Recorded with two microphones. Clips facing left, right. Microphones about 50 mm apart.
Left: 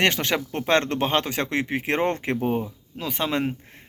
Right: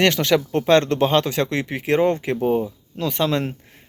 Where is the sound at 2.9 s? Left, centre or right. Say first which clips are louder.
Right 4 dB; centre.